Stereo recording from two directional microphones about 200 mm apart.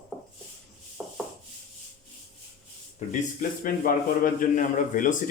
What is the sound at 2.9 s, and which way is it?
A man's voice, 45° left (ahead or behind).